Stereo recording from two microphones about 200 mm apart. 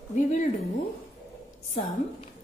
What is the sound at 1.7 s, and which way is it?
Speech, 35° left (ahead or behind).